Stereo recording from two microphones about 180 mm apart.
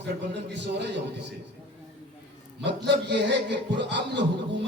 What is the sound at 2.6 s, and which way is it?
A man's voice, 75° right (ahead or behind).